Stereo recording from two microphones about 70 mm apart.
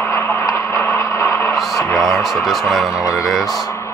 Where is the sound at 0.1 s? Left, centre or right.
Left.